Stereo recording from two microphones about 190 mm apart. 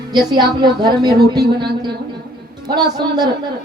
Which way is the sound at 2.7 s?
20° right (ahead or behind).